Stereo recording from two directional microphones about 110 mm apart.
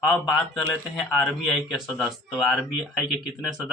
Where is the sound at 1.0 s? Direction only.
15° left (ahead or behind).